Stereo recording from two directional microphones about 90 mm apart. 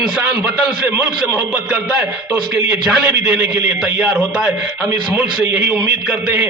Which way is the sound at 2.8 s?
10° right (ahead or behind).